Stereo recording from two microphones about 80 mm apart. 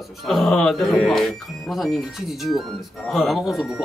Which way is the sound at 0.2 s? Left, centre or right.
Centre.